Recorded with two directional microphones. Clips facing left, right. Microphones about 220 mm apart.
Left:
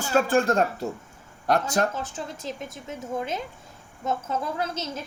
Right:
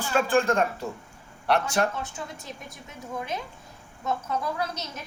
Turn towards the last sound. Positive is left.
turn(degrees=25)  # may be behind; listen again after turning